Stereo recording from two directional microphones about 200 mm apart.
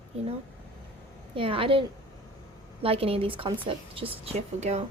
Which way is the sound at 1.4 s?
25° right (ahead or behind).